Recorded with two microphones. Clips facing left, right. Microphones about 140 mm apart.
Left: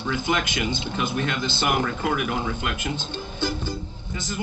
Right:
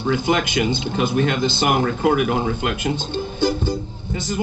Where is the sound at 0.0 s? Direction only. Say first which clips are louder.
Right 6 dB; 35° right (ahead or behind).